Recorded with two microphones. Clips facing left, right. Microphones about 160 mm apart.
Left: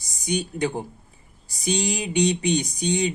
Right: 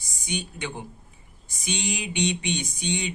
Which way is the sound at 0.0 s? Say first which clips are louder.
Left 6 dB; 40° left (ahead or behind).